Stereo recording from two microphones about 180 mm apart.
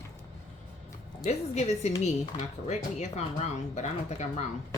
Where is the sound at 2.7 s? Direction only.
40° left (ahead or behind).